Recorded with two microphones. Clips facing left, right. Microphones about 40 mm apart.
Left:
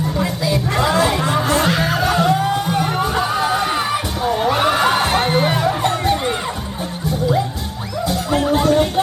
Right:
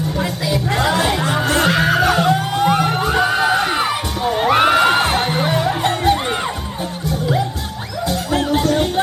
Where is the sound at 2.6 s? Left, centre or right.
Right.